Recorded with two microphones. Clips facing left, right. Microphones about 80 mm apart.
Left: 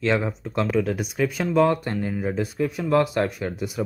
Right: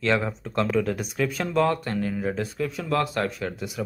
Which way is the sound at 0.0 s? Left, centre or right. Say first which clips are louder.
Left 1 dB; centre.